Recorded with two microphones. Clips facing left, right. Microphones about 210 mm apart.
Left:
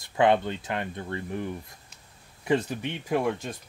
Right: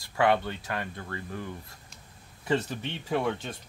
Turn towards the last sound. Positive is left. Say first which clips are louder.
# left 2 dB
turn(degrees=10)  # may be behind; listen again after turning